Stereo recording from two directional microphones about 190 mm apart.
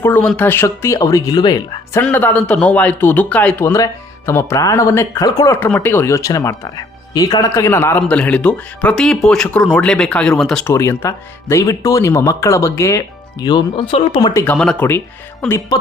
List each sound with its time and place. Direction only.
0.0 s speech: 10° left (ahead or behind)
2.0 s speech: 10° left (ahead or behind)
14.4 s speech: 5° left (ahead or behind)